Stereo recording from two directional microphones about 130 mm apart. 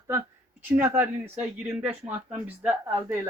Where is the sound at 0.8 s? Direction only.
15° right (ahead or behind).